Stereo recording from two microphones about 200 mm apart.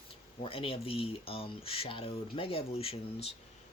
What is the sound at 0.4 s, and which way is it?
Speech, 25° left (ahead or behind).